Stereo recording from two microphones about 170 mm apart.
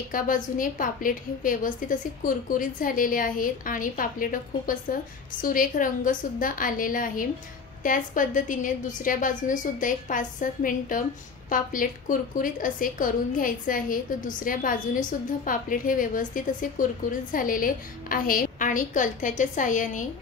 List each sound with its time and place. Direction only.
0.1 s a woman's voice: 55° left (ahead or behind)